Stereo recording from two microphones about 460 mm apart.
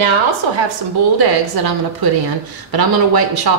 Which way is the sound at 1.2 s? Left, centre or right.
Right.